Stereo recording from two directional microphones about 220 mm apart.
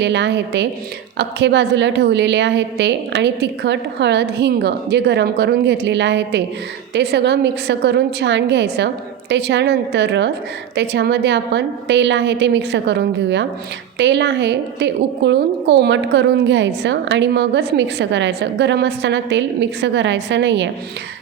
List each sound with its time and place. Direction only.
0.0 s a woman's voice: 55° right (ahead or behind)